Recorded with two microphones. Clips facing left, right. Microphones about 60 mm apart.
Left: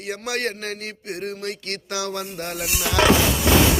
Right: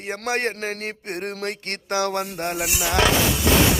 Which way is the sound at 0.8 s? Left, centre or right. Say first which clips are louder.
Right 2 dB; right.